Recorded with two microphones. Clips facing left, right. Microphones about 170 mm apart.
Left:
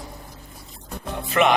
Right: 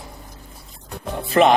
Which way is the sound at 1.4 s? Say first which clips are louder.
Right 4 dB; 35° right (ahead or behind).